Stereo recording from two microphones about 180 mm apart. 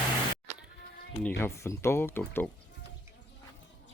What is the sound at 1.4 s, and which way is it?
Speech, 15° left (ahead or behind).